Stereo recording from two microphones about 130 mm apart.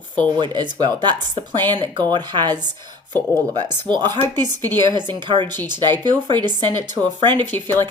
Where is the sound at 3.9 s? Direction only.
35° right (ahead or behind).